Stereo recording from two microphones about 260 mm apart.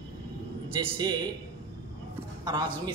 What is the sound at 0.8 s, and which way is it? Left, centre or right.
Speech, centre.